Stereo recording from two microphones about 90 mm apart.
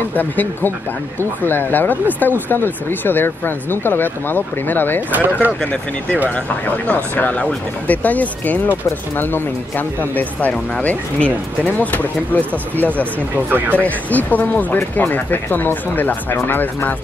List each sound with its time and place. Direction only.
0.1 s speech: 20° left (ahead or behind)
5.1 s speech: 20° right (ahead or behind)
6.9 s speech: 15° left (ahead or behind)
13.5 s speech: 20° right (ahead or behind)
13.8 s speech: 20° left (ahead or behind)